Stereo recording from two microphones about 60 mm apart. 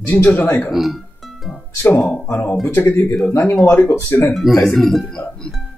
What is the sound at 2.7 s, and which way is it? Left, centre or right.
Speech, left.